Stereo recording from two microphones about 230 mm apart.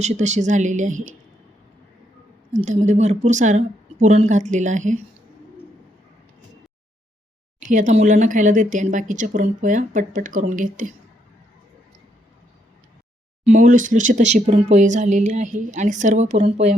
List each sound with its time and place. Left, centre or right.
0.0 s speech: right
2.5 s speech: right
7.7 s speech: right
13.4 s speech: right